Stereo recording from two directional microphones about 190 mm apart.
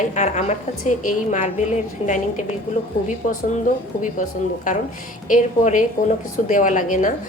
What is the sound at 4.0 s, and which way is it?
A woman's voice, 40° left (ahead or behind).